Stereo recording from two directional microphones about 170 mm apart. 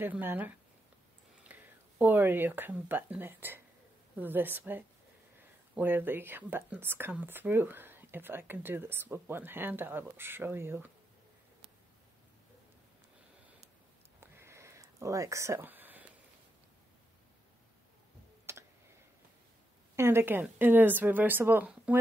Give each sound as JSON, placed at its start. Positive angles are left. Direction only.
{"t": 0.0, "sound": "speech", "side_deg": -10}
{"t": 14.2, "sound": "a sound", "side_deg": -15}
{"t": 18.5, "sound": "clicking", "side_deg": -15}
{"t": 20.0, "sound": "speech", "side_deg": -15}